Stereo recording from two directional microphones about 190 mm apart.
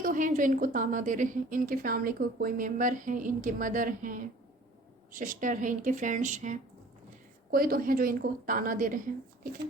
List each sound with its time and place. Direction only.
0.0 s a woman's voice: 45° right (ahead or behind)